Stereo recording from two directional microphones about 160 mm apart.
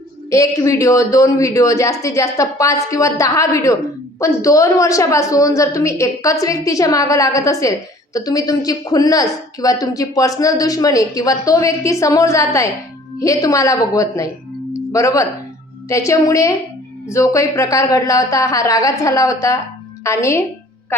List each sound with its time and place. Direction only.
0.3 s a woman's voice: 20° left (ahead or behind)
14.7 s tuning fork: 20° left (ahead or behind)
15.9 s a woman's voice: 20° left (ahead or behind)